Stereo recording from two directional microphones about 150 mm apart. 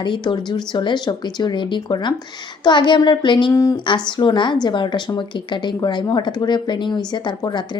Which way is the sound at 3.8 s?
30° left (ahead or behind).